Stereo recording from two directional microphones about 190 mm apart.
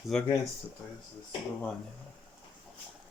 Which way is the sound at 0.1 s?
5° left (ahead or behind).